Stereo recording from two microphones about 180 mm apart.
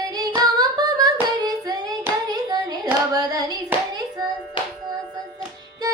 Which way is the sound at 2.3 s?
20° right (ahead or behind).